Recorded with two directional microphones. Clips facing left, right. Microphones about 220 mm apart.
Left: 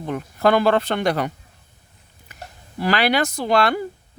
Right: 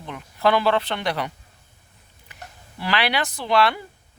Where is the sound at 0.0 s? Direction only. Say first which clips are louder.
Left 3 dB; 45° left (ahead or behind).